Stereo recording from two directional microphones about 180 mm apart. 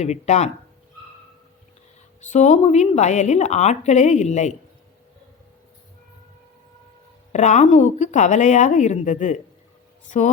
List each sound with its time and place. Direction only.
0.0 s a woman's voice: 40° left (ahead or behind)
2.2 s a woman's voice: 40° left (ahead or behind)
7.3 s a woman's voice: 40° left (ahead or behind)